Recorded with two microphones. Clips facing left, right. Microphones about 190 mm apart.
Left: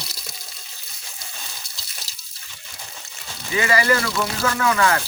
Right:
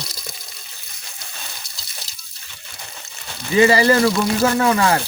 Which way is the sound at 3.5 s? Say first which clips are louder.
Right 7 dB; 35° right (ahead or behind).